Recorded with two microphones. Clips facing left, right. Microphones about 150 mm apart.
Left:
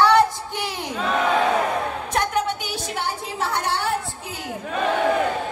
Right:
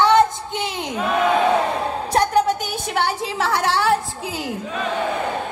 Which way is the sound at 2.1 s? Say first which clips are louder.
Right 7 dB; 35° right (ahead or behind).